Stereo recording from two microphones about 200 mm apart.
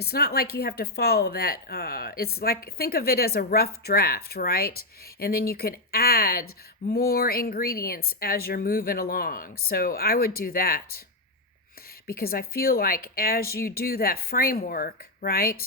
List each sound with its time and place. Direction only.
0.0 s speech: 50° left (ahead or behind)
12.0 s speech: 50° left (ahead or behind)